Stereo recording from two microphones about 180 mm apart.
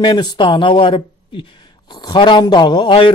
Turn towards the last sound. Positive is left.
turn(degrees=25)  # may be behind; listen again after turning